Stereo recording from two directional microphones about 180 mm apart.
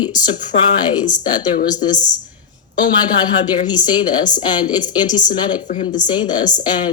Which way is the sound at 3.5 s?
25° left (ahead or behind).